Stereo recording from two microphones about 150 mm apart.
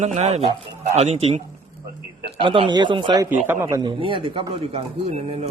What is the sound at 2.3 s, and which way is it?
Speech, 35° right (ahead or behind).